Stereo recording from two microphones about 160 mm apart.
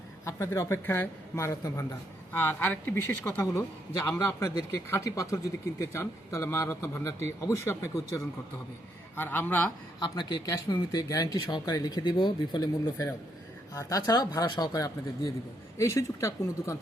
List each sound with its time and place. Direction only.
0.3 s a man's voice: 20° left (ahead or behind)
9.1 s a man's voice: 15° left (ahead or behind)
10.0 s a man's voice: 25° left (ahead or behind)